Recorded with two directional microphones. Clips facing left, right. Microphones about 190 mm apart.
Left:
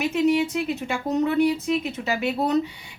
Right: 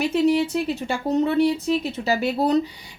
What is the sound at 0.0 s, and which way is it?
A woman's voice, 35° right (ahead or behind).